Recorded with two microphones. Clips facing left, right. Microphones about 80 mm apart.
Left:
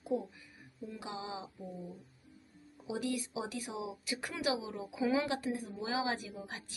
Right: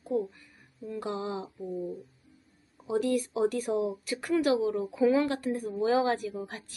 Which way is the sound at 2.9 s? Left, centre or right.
Centre.